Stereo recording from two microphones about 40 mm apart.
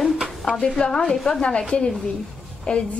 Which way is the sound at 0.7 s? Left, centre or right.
Left.